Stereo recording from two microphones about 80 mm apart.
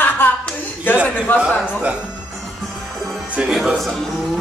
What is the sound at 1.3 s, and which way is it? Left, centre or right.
Speech, left.